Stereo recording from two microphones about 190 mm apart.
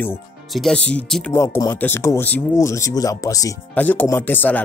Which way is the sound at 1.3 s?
15° left (ahead or behind).